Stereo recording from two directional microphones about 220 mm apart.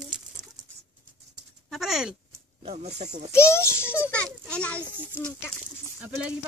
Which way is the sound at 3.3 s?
10° left (ahead or behind).